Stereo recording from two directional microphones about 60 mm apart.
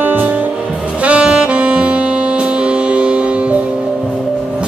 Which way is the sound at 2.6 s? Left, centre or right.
Centre.